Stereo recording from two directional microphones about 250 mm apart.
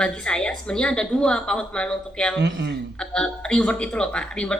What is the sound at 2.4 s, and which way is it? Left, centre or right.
Speech, right.